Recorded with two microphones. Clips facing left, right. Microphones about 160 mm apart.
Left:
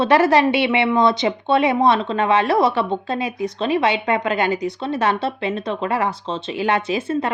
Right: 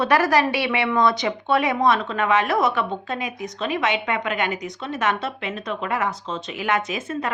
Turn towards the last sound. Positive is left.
turn(degrees=30)  # may be behind; listen again after turning